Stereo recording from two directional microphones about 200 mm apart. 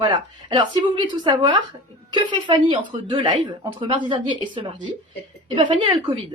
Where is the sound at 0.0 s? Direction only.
25° right (ahead or behind).